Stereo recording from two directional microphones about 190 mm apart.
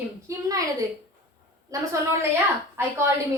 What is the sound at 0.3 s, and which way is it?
A woman's voice, 20° right (ahead or behind).